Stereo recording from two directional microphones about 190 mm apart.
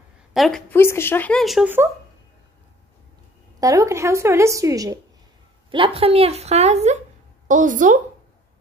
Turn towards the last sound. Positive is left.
turn(degrees=-45)  # may be behind; listen again after turning